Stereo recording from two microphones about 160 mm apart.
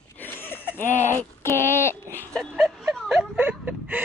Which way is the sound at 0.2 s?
10° left (ahead or behind).